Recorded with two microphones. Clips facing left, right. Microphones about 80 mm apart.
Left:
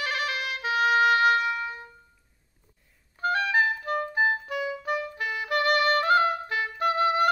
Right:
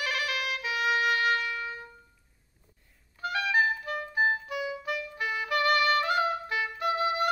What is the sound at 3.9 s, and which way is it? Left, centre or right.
Clarinet, left.